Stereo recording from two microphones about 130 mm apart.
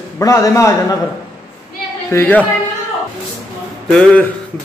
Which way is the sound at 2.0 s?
15° left (ahead or behind).